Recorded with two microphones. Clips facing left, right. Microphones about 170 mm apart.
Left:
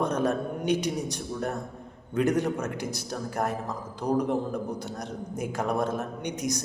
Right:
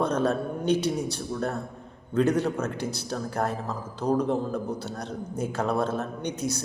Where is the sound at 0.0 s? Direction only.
15° left (ahead or behind).